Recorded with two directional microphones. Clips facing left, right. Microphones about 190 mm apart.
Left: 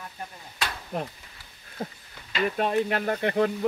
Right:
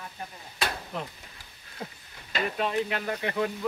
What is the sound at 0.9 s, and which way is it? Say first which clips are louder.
Speech: left 4 dB; 50° left (ahead or behind).